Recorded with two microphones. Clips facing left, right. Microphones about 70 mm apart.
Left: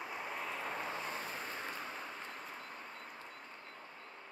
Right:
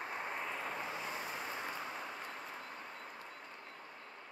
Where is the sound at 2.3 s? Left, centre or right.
Centre.